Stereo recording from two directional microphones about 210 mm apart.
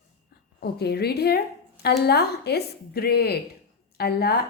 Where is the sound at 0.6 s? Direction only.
50° left (ahead or behind).